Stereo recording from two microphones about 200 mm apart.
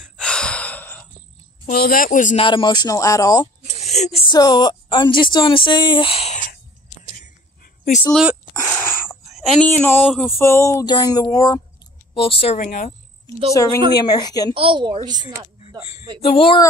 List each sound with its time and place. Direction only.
0.0 s gasp: 5° left (ahead or behind)
1.7 s speech: 50° left (ahead or behind)
2.4 s speech: 25° left (ahead or behind)
3.8 s speech: 35° left (ahead or behind)
8.1 s speech: 5° right (ahead or behind)
8.5 s a sound: 15° left (ahead or behind)
9.3 s a sound: centre (ahead or behind)
9.7 s speech: 10° left (ahead or behind)
10.3 s speech: 15° left (ahead or behind)
12.1 s speech: 30° left (ahead or behind)
13.9 s speech: 20° left (ahead or behind)
14.5 s a woman's voice: 25° right (ahead or behind)
16.3 s speech: 25° left (ahead or behind)